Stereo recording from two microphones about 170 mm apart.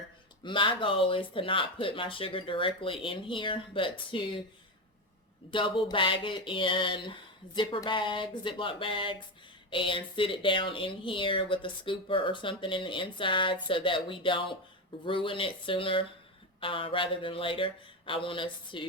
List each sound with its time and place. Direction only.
0.4 s speech: 30° left (ahead or behind)
5.5 s speech: 30° left (ahead or behind)